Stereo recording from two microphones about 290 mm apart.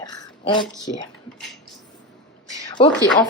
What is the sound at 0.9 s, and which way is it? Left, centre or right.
Speech, centre.